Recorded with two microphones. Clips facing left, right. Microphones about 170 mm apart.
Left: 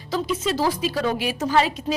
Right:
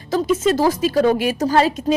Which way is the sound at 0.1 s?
45° right (ahead or behind).